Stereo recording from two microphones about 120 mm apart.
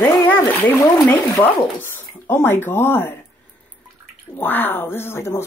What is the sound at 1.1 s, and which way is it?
Speech, 15° left (ahead or behind).